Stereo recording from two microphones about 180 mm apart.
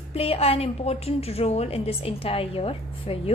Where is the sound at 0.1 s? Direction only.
35° left (ahead or behind).